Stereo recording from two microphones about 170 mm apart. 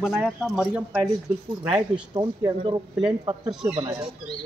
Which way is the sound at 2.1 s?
20° right (ahead or behind).